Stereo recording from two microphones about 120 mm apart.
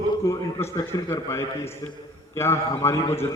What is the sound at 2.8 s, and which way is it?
Speech, 20° left (ahead or behind).